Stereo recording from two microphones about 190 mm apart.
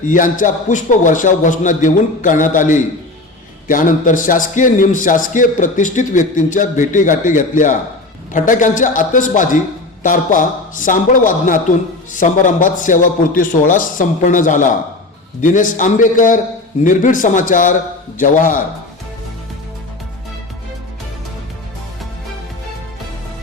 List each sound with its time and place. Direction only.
0.1 s a man's voice: 45° left (ahead or behind)